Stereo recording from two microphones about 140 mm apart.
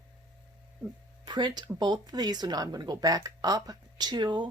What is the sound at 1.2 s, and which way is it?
Speech, 30° right (ahead or behind).